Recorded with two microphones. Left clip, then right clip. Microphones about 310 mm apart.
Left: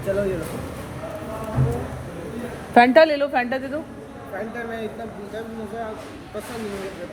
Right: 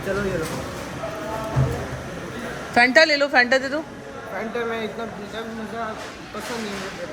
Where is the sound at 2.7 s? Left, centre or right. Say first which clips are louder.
Left 2 dB; centre.